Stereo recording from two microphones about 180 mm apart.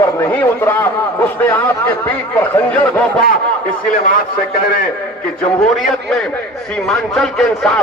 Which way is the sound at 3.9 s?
50° left (ahead or behind).